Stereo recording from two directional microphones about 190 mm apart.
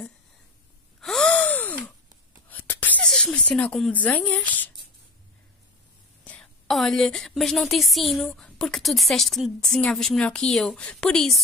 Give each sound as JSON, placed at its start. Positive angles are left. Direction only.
{"t": 1.0, "sound": "gasp", "side_deg": 5}
{"t": 2.5, "sound": "a sound", "side_deg": 10}
{"t": 6.2, "sound": "a woman's voice", "side_deg": 5}